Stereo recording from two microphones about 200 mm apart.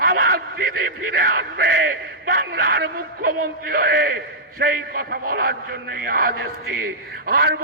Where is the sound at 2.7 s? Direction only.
50° right (ahead or behind).